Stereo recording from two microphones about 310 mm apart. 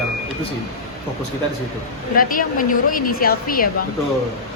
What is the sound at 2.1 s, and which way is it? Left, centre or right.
A woman's voice, left.